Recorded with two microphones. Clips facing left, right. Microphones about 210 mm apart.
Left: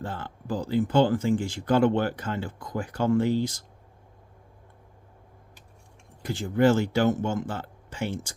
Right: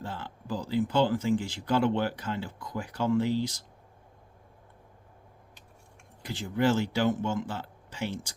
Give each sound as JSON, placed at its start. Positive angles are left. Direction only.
{"t": 0.0, "sound": "speech", "side_deg": 50}
{"t": 6.2, "sound": "speech", "side_deg": 45}